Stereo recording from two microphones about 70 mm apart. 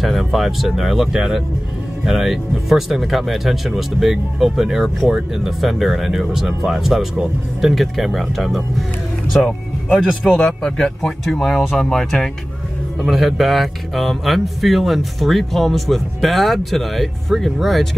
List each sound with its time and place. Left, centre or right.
0.0 s speech: centre
9.9 s speech: centre
10.3 s speech: centre